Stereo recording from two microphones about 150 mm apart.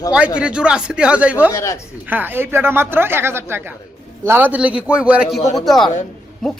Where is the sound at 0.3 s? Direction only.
5° right (ahead or behind).